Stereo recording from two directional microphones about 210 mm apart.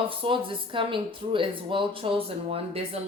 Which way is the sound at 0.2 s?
25° right (ahead or behind).